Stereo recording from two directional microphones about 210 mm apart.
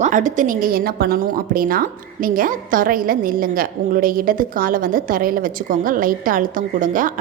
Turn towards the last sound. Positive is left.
turn(degrees=-40)  # may be behind; listen again after turning